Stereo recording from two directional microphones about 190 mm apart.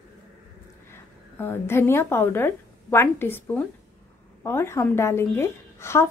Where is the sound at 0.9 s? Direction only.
10° left (ahead or behind).